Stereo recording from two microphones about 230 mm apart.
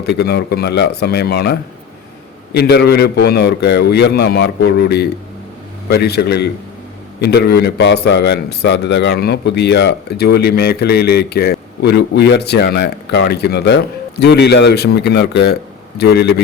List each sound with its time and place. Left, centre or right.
0.0 s a man's voice: left